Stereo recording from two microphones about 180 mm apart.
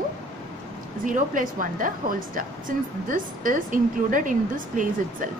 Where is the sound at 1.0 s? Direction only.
45° right (ahead or behind).